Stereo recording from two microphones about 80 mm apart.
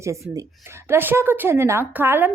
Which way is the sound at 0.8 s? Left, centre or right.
Right.